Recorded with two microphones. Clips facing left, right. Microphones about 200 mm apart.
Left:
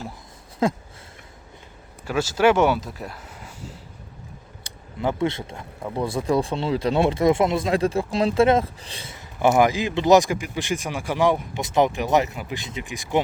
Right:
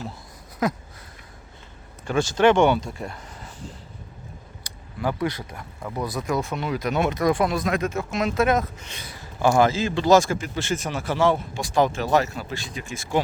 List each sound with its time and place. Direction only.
0.6 s speech: 25° left (ahead or behind)
2.0 s speech: 5° left (ahead or behind)
4.6 s speech: 25° left (ahead or behind)